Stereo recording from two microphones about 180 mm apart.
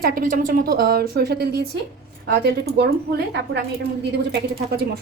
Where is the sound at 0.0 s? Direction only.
50° right (ahead or behind).